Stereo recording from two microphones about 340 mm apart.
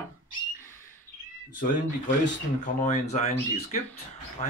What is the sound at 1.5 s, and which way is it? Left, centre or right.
Speech, left.